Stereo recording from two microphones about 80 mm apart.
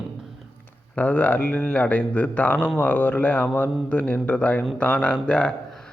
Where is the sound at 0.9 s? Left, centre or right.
Left.